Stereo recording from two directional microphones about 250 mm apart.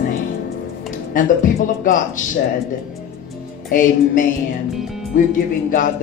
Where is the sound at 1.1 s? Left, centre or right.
Left.